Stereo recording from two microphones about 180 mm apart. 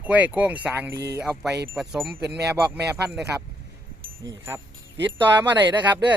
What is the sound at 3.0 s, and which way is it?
Speech, 5° right (ahead or behind).